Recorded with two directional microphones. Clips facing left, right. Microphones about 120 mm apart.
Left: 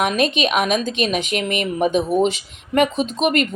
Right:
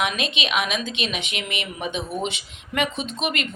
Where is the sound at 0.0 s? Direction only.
40° left (ahead or behind).